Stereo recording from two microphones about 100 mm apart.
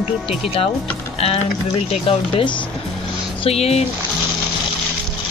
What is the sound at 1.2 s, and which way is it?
Speech, 85° left.